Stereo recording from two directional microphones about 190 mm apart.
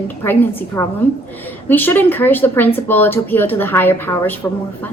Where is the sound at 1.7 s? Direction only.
10° left (ahead or behind).